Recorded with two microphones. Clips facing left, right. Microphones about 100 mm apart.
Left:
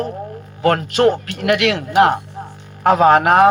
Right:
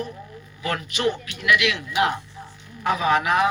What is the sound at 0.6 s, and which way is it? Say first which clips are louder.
Speech: left 10 dB; 55° left (ahead or behind).